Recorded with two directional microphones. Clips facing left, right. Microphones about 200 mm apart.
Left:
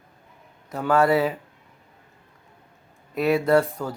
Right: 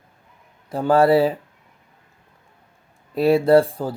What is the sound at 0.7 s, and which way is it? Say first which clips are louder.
Speech: right 4 dB; 30° right (ahead or behind).